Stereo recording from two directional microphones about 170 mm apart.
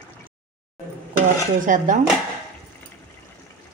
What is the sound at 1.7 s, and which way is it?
Speech, 50° right (ahead or behind).